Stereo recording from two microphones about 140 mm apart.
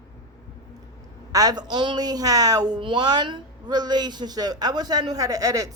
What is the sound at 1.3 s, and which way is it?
A woman's voice, 25° right (ahead or behind).